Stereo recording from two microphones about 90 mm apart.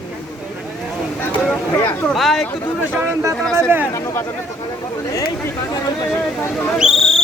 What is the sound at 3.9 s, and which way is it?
Speech, 35° left (ahead or behind).